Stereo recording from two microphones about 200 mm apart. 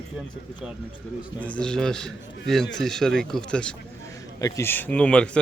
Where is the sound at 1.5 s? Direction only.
5° left (ahead or behind).